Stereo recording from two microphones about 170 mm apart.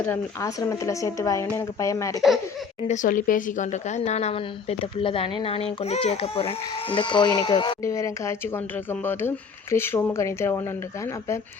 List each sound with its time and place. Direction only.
0.1 s speech: 15° left (ahead or behind)
2.8 s speech: 45° left (ahead or behind); by 11.3 s 15° left (ahead or behind)